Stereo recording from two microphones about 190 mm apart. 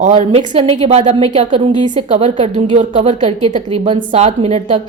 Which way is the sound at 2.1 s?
35° right (ahead or behind).